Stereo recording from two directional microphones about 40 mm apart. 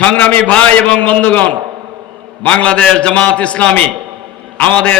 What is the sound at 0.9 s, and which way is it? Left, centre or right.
A man's voice, left.